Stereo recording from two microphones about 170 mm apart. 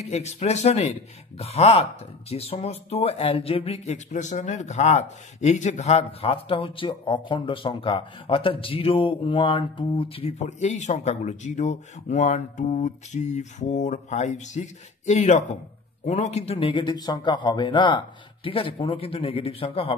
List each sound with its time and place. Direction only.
0.1 s speech: 40° left (ahead or behind)